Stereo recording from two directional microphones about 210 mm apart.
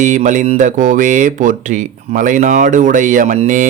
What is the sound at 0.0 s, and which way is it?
Speech, 35° right (ahead or behind).